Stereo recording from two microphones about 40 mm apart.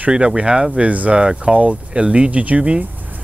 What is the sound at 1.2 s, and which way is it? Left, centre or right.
Speech, right.